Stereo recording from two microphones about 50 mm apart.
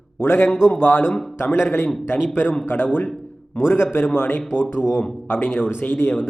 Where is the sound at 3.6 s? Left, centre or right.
Left.